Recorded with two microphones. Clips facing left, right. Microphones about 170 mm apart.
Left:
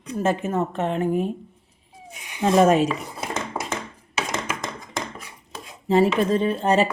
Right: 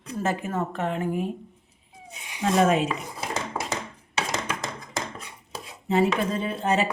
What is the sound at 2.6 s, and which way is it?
Speech, 40° left (ahead or behind).